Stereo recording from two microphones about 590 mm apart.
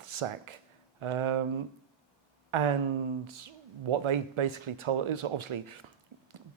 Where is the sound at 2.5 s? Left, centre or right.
Right.